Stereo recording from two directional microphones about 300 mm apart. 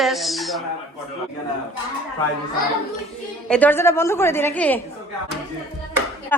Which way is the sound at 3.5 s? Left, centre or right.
Centre.